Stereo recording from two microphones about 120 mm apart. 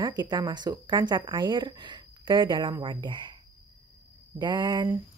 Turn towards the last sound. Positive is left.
turn(degrees=-35)  # may be behind; listen again after turning